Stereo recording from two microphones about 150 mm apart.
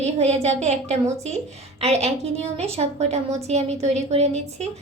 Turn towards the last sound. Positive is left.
turn(degrees=-45)  # may be behind; listen again after turning